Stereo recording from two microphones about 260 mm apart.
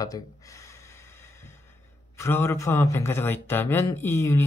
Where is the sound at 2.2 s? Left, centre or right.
Centre.